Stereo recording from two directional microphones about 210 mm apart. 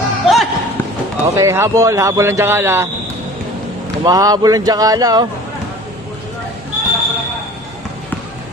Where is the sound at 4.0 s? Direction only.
15° right (ahead or behind).